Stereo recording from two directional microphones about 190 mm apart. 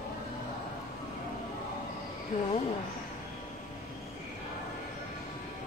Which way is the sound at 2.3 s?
40° left (ahead or behind).